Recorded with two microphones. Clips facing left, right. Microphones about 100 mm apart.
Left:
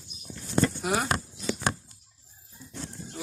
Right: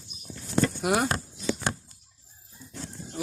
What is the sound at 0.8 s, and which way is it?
Speech, 50° right (ahead or behind).